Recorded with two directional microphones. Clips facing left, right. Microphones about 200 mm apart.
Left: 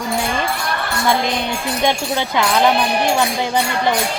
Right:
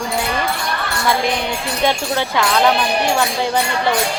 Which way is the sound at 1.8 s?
15° left (ahead or behind).